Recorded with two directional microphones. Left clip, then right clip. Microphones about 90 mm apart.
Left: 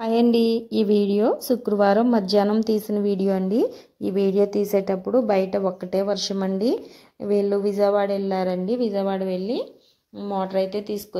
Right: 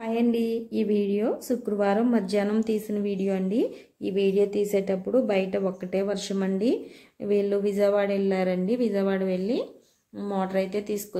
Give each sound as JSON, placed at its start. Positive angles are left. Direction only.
{"t": 0.0, "sound": "speech", "side_deg": 75}
{"t": 0.5, "sound": "a sound", "side_deg": 60}
{"t": 1.2, "sound": "speech", "side_deg": 40}
{"t": 2.4, "sound": "a woman's voice", "side_deg": 25}
{"t": 4.9, "sound": "a woman's voice", "side_deg": 15}